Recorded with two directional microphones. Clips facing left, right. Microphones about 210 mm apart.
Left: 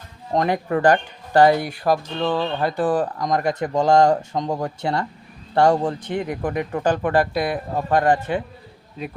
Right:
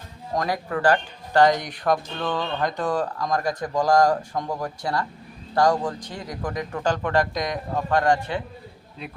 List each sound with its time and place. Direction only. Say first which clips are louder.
0.3 s speech: left 5 dB; 25° left (ahead or behind)
1.3 s a man's voice: left 3 dB; 10° left (ahead or behind); by 5.9 s 25° left (ahead or behind)
6.0 s speech: left 10 dB; 60° left (ahead or behind)
6.4 s a man's voice: left 1 dB; 20° left (ahead or behind)